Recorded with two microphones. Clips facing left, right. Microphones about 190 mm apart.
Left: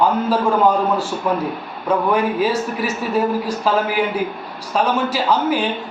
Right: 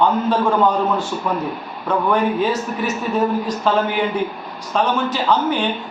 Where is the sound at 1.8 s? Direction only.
5° left (ahead or behind).